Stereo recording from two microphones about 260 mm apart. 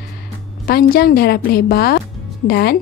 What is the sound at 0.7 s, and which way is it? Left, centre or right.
A woman's voice, left.